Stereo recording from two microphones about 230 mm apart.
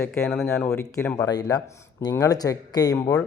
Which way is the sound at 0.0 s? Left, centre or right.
Centre.